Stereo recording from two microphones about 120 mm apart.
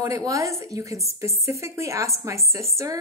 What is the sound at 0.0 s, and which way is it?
Speech, 25° right (ahead or behind).